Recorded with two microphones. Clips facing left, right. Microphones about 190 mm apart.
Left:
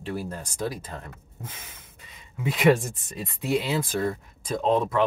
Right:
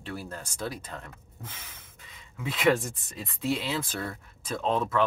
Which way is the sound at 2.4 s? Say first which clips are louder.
Left 4 dB; 15° left (ahead or behind).